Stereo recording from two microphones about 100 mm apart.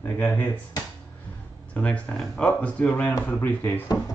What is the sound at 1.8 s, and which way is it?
Speech, 10° left (ahead or behind).